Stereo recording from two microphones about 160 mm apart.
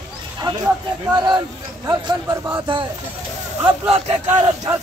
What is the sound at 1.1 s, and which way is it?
Speech, 25° right (ahead or behind).